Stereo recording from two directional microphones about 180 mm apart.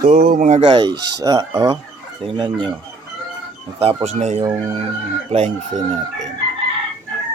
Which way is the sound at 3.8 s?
35° right (ahead or behind).